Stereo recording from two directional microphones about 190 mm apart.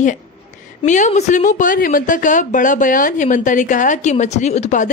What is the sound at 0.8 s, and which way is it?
Speech, 40° left (ahead or behind).